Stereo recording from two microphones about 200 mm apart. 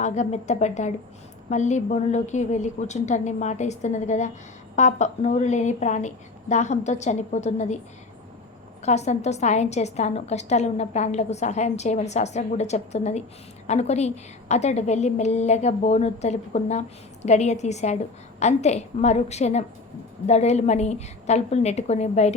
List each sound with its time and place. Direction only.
0.0 s a woman's voice: 35° left (ahead or behind)
8.8 s a woman's voice: 35° left (ahead or behind)